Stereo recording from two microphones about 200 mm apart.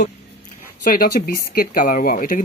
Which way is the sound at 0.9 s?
45° left (ahead or behind).